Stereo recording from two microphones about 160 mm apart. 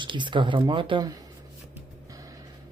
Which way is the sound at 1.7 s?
20° right (ahead or behind).